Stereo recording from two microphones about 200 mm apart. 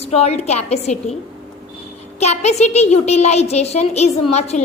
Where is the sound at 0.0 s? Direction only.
30° left (ahead or behind).